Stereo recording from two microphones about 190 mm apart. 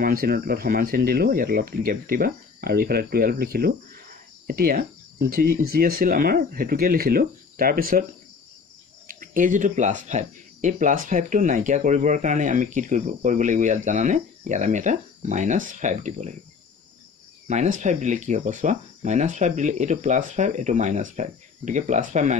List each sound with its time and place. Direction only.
0.0 s speech: 50° right (ahead or behind)
4.5 s speech: 50° right (ahead or behind)
9.0 s speech: 45° right (ahead or behind)
17.5 s speech: 40° right (ahead or behind)